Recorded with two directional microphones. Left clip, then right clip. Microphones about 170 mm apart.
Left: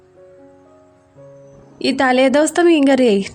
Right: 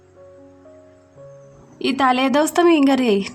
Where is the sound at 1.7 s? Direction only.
40° left (ahead or behind).